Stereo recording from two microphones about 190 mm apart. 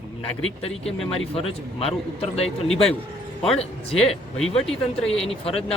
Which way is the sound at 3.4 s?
30° left (ahead or behind).